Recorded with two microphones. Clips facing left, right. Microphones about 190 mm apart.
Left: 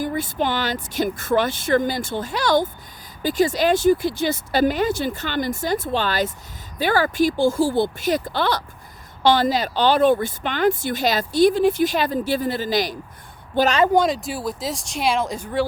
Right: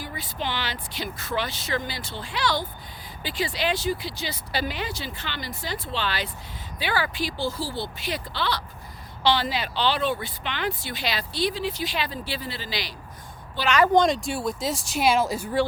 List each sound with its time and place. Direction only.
0.0 s speech: 50° left (ahead or behind)
13.9 s speech: 5° left (ahead or behind)